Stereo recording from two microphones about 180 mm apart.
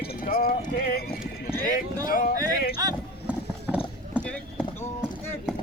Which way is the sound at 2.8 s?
20° right (ahead or behind).